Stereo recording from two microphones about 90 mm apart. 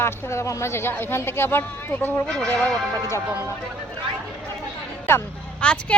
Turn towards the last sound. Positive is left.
turn(degrees=10)  # may be behind; listen again after turning